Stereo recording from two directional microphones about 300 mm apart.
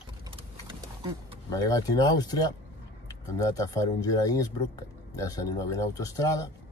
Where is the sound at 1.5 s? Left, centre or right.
Centre.